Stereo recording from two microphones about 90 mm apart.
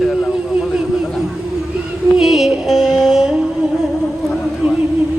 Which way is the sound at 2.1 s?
5° right (ahead or behind).